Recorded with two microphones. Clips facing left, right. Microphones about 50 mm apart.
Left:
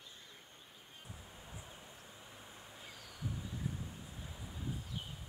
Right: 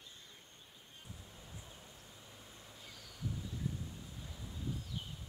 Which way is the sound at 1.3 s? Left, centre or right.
Centre.